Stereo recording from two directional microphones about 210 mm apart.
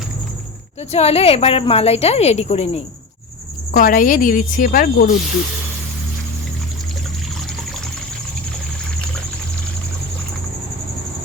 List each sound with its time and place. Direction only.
0.8 s speech: 30° left (ahead or behind)
3.7 s speech: 40° left (ahead or behind)